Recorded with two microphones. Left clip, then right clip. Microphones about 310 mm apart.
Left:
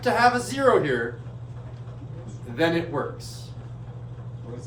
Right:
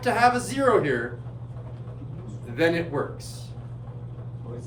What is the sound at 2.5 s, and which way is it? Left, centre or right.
Speech, centre.